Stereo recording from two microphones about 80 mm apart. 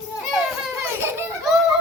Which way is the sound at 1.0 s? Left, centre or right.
Right.